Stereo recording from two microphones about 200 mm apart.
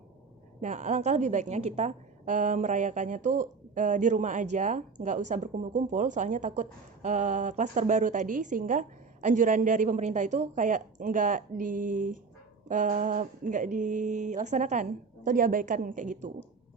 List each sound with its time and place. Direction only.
0.6 s a woman's voice: 40° right (ahead or behind)